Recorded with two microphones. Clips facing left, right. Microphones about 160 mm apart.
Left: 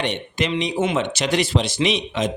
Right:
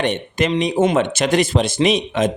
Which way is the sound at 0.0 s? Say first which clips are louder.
Right 4 dB; 50° right (ahead or behind).